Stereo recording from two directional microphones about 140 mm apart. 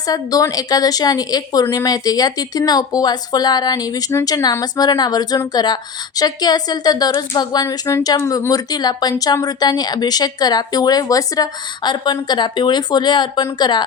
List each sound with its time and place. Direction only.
0.1 s a woman's voice: 25° left (ahead or behind)